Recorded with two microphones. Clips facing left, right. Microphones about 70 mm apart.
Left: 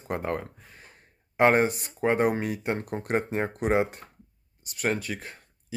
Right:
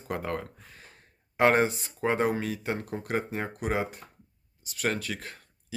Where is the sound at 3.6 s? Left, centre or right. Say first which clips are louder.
Left 5 dB; left.